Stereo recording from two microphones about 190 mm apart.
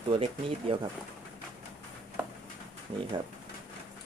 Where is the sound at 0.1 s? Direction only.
25° right (ahead or behind).